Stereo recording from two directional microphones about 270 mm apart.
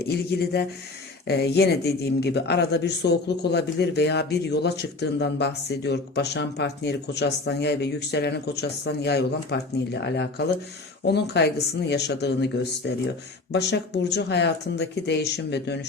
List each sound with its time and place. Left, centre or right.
0.0 s speech: left